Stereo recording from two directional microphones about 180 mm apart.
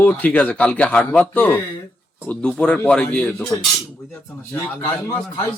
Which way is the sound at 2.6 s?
5° left (ahead or behind).